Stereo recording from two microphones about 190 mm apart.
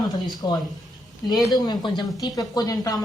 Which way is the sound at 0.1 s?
20° left (ahead or behind).